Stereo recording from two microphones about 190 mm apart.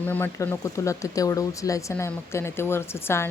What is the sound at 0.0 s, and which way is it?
A woman's voice, 10° left (ahead or behind).